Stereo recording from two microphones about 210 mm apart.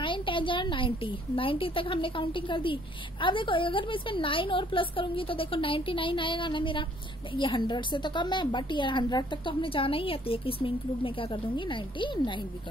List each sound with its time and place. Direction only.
0.0 s a woman's voice: 25° left (ahead or behind)